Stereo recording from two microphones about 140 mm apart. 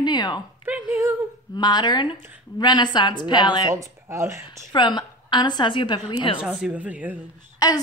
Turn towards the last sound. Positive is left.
turn(degrees=25)  # may be behind; listen again after turning